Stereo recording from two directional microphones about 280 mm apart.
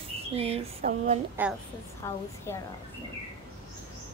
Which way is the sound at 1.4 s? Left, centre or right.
Centre.